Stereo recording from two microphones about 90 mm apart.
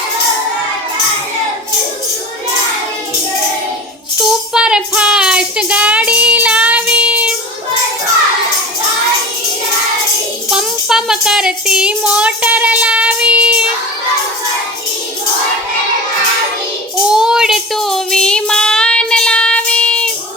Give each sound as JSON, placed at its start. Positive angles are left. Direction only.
{"t": 4.3, "sound": "music", "side_deg": -5}
{"t": 10.5, "sound": "music", "side_deg": -5}
{"t": 17.1, "sound": "music", "side_deg": -5}